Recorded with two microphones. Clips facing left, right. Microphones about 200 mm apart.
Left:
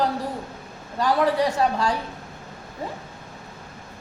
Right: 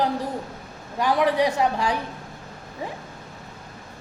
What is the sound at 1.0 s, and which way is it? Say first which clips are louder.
Speech: even; 15° right (ahead or behind).